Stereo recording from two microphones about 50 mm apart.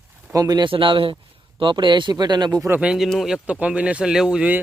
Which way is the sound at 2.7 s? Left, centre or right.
Right.